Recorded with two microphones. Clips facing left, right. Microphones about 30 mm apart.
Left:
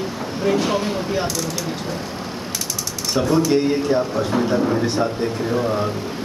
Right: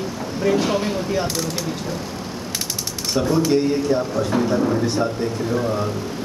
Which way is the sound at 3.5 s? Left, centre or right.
Centre.